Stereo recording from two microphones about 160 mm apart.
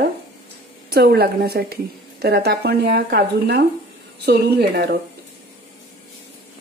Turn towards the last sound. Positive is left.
turn(degrees=-80)